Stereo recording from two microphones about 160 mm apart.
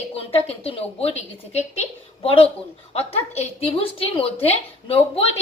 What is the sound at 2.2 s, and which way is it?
A woman's voice, 35° left (ahead or behind).